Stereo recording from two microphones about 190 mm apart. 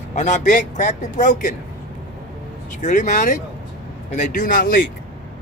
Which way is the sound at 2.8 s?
40° left (ahead or behind).